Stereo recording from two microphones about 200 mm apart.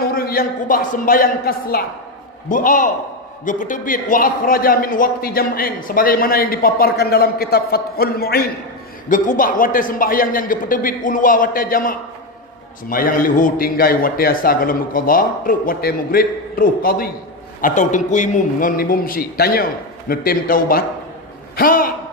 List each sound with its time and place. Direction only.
0.0 s a man's voice: 50° left (ahead or behind)
9.0 s a man's voice: 40° left (ahead or behind)